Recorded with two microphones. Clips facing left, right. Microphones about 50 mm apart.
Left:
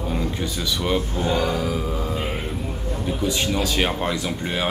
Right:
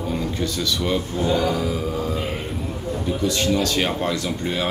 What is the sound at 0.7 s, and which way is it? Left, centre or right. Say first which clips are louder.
Speech: left 3 dB; centre.